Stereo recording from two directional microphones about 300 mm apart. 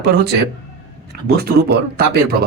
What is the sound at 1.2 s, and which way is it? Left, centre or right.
Speech, right.